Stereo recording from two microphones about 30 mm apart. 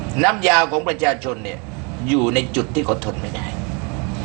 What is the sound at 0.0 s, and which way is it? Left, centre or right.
A man's voice, centre.